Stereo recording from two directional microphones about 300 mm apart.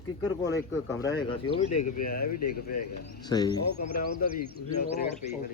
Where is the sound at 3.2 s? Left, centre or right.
Centre.